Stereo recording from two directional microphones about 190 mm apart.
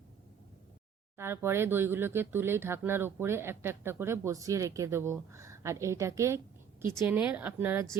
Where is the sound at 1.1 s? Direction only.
10° right (ahead or behind).